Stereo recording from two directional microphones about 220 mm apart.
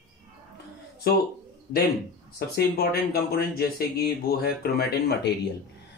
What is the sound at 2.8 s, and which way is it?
Speech, 45° left (ahead or behind).